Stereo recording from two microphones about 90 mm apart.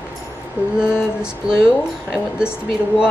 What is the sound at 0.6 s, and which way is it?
Mantra, 20° right (ahead or behind).